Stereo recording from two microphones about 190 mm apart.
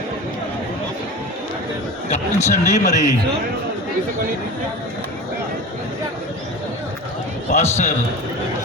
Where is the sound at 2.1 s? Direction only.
35° left (ahead or behind).